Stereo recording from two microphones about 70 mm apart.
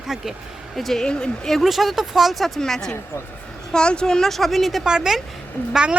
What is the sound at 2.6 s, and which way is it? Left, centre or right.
Speech, centre.